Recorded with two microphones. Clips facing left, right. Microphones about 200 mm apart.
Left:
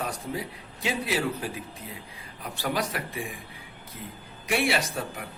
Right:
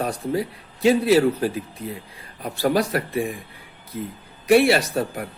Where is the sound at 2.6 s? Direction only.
40° right (ahead or behind).